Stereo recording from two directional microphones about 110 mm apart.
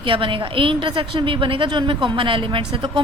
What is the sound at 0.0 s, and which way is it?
A woman's voice, 55° right (ahead or behind).